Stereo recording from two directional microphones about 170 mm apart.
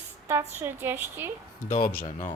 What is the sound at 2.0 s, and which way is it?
Speech, 45° left (ahead or behind).